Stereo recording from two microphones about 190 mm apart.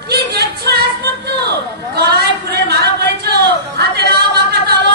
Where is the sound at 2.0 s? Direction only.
55° right (ahead or behind).